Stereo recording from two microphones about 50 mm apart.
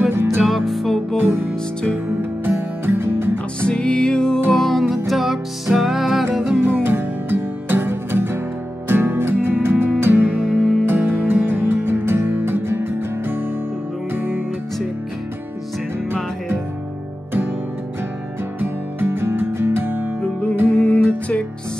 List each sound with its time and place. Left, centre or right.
0.1 s music: right
0.5 s music: centre
1.2 s music: right
3.6 s music: centre
4.5 s music: centre
6.6 s music: right
10.4 s music: centre
10.9 s music: right
18.6 s music: right
20.2 s music: left